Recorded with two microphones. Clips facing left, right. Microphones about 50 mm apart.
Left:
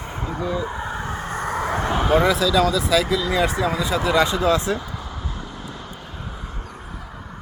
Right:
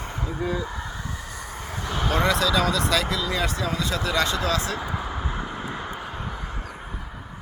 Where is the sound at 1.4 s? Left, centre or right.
Left.